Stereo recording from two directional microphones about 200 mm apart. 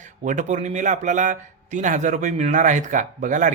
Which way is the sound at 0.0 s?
40° right (ahead or behind).